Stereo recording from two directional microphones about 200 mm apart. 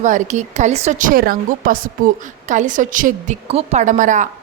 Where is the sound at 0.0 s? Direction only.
35° right (ahead or behind).